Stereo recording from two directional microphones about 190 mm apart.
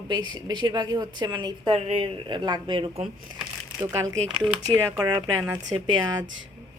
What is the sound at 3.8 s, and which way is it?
Speech, 15° right (ahead or behind).